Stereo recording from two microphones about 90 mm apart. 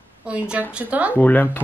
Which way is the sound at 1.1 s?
20° left (ahead or behind).